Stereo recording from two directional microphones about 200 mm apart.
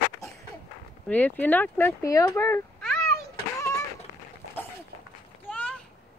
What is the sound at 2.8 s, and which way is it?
Children playing, 5° left (ahead or behind).